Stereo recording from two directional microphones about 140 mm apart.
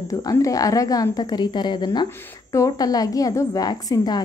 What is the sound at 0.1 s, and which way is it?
A woman's voice, 25° left (ahead or behind).